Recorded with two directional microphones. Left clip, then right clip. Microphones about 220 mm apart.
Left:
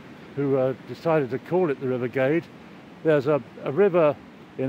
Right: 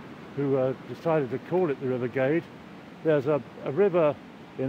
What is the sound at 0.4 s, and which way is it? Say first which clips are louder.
Speech: left 3 dB; 15° left (ahead or behind).